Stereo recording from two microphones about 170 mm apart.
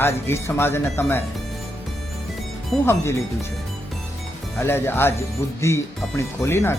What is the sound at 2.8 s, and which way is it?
Speech, 15° left (ahead or behind).